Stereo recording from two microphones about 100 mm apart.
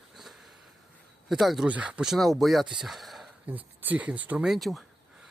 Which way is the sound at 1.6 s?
15° right (ahead or behind).